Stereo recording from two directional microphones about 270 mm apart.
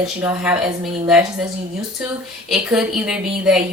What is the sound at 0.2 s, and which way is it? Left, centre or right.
Speech, centre.